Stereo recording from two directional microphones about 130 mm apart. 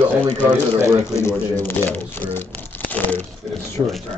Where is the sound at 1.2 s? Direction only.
15° left (ahead or behind).